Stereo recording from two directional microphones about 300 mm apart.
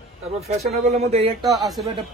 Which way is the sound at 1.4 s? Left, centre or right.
Centre.